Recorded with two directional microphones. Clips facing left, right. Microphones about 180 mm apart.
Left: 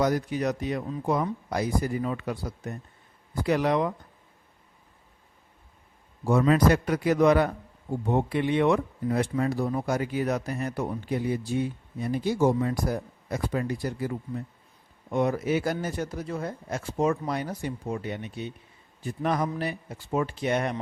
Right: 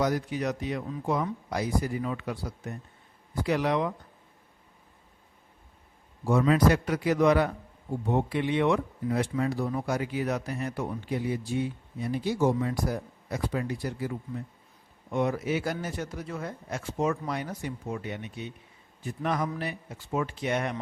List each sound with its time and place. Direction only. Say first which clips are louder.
0.0 s speech: left 2 dB; 45° left (ahead or behind)
6.2 s speech: left 1 dB; 45° left (ahead or behind)
15.1 s speech: left 3 dB; 40° left (ahead or behind)